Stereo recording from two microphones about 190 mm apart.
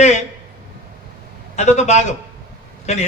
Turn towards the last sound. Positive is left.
turn(degrees=35)  # may be behind; listen again after turning